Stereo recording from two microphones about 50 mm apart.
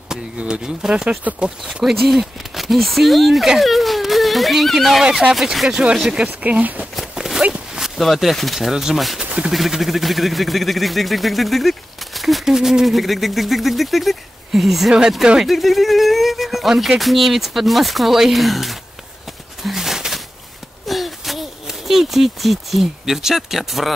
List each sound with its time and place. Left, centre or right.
0.4 s speech: centre
1.3 s speech: right
1.6 s speech: centre
6.6 s speech: right
7.2 s walk: centre
8.0 s speech: centre
9.2 s a sound: centre
9.5 s speech: centre
19.6 s a sound: centre